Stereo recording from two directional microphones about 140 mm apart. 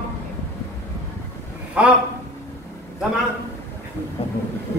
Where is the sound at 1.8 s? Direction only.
10° right (ahead or behind).